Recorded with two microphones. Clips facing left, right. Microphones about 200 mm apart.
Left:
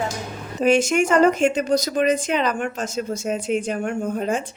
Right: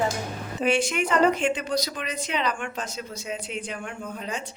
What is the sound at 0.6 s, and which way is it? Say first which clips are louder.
Speech: left 7 dB; 45° left (ahead or behind).